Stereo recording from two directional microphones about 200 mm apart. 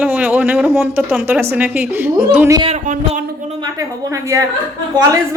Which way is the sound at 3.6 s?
15° right (ahead or behind).